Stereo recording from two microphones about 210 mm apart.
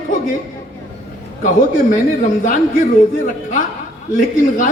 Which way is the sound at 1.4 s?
40° left (ahead or behind).